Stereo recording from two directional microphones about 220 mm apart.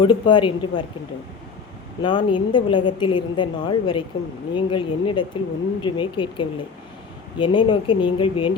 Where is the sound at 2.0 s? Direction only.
20° left (ahead or behind).